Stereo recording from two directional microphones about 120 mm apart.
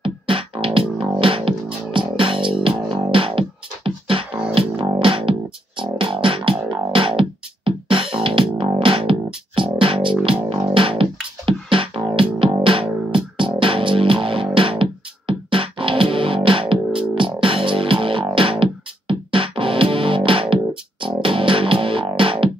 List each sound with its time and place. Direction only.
0.0 s music: 45° right (ahead or behind)